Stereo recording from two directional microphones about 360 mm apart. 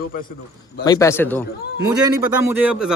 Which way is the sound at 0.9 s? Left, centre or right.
Centre.